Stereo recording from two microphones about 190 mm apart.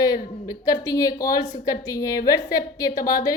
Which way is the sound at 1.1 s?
50° left (ahead or behind).